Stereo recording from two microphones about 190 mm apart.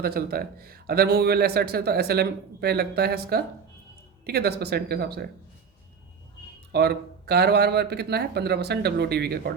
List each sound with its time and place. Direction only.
0.0 s a man's voice: 55° right (ahead or behind)
6.7 s a man's voice: 60° right (ahead or behind)